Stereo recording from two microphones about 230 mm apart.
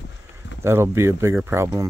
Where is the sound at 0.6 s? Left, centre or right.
Centre.